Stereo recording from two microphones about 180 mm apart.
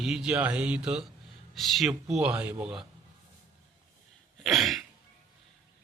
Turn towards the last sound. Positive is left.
turn(degrees=0)  # may be behind; listen again after turning